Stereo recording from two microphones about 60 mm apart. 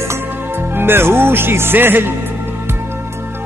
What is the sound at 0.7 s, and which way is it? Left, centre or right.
Speech, right.